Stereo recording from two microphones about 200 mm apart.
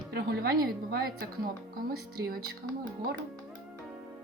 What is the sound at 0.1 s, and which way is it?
Speech, 55° right (ahead or behind).